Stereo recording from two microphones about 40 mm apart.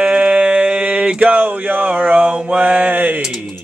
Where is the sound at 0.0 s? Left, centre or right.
Right.